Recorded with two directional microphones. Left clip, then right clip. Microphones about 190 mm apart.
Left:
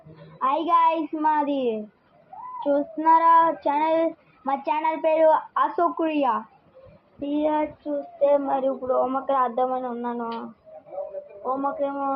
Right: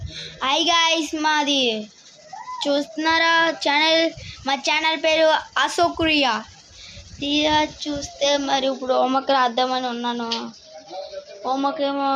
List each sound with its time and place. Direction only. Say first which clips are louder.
0.3 s child singing: right 2 dB; 25° right (ahead or behind)
8.8 s speech: right 4 dB; 40° right (ahead or behind)
11.4 s speech: right 4 dB; 50° right (ahead or behind)